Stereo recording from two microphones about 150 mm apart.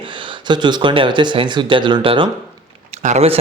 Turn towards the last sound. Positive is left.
turn(degrees=-45)  # may be behind; listen again after turning